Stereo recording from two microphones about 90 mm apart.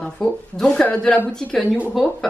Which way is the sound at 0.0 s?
5° left (ahead or behind).